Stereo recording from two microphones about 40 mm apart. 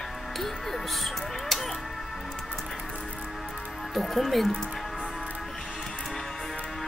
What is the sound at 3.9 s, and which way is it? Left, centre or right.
Speech, centre.